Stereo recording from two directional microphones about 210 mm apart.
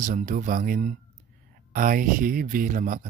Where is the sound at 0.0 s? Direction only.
40° right (ahead or behind).